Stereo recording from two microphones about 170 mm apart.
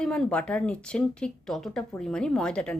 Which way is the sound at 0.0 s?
5° left (ahead or behind).